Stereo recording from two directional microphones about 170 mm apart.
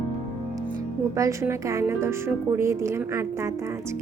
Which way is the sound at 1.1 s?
20° right (ahead or behind).